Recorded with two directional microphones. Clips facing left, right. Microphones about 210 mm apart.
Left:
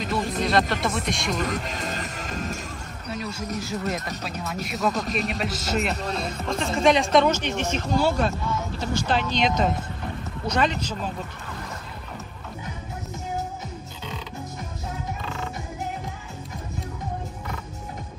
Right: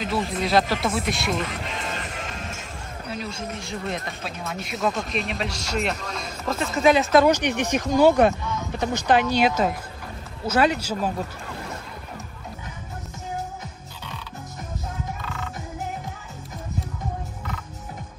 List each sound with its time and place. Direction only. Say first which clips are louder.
0.0 s speech: even; centre (ahead or behind)
1.4 s music: left 2 dB; 45° left (ahead or behind)
3.1 s speech: left 1 dB; centre (ahead or behind)
5.9 s speech: left 5 dB; 35° left (ahead or behind)
6.4 s speech: right 1 dB; 5° right (ahead or behind)
7.3 s speech: right 3 dB; 15° right (ahead or behind)